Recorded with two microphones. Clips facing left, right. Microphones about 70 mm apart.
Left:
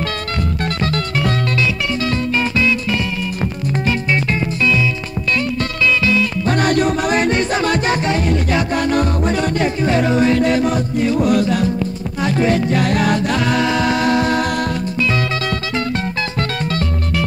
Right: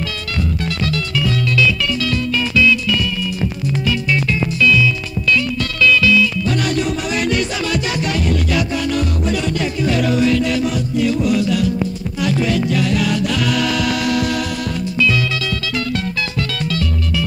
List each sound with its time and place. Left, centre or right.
1.1 s music: left